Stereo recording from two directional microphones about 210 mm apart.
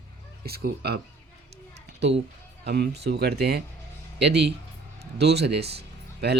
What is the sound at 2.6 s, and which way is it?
Speech, 50° right (ahead or behind).